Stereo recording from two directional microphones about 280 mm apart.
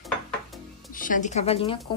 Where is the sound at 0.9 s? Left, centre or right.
Left.